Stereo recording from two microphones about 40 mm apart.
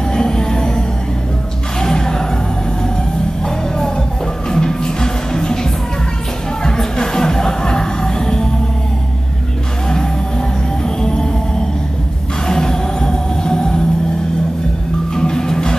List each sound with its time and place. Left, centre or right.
0.1 s music: centre
1.8 s a sound: centre
3.4 s music: centre
11.0 s music: centre
12.4 s music: centre
15.1 s music: centre